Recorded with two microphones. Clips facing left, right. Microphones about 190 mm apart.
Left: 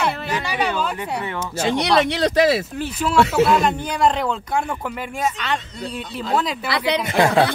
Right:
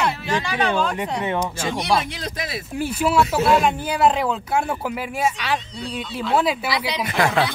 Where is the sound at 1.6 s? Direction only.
75° left (ahead or behind).